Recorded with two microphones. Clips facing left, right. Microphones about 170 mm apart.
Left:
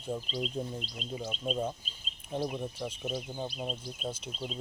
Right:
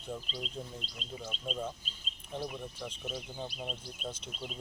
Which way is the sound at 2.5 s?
25° left (ahead or behind).